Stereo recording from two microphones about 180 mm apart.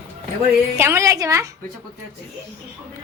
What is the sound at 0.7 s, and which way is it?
Speech, 15° right (ahead or behind).